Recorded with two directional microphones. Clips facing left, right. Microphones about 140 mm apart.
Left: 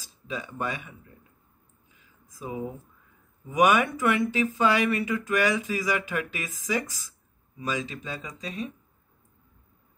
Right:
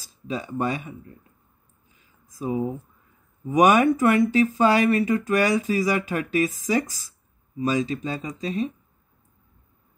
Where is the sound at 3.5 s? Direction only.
40° right (ahead or behind).